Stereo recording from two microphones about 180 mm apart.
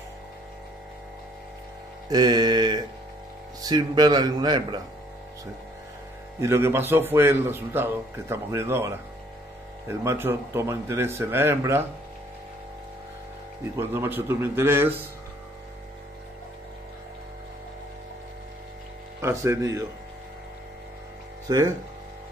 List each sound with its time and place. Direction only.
2.0 s mantra: 25° right (ahead or behind)
3.6 s speech: 20° right (ahead or behind)
6.4 s a man's voice: 15° right (ahead or behind)
13.7 s a man's voice: 15° right (ahead or behind)
19.2 s a man's voice: 15° right (ahead or behind)
21.5 s speech: 20° right (ahead or behind)